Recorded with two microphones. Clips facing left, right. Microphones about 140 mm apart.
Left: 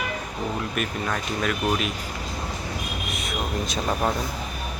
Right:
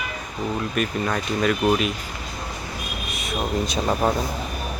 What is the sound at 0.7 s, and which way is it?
Speech, centre (ahead or behind).